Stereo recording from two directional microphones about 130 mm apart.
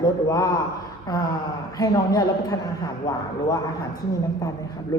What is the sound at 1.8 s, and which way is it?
Speech, 30° left (ahead or behind).